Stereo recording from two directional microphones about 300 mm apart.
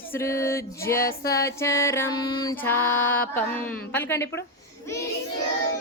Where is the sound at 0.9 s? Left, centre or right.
Left.